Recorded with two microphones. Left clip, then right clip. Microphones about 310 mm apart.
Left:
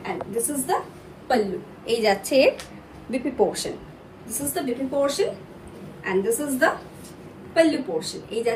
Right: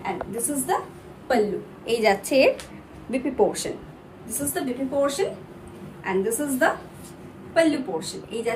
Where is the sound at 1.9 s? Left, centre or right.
Centre.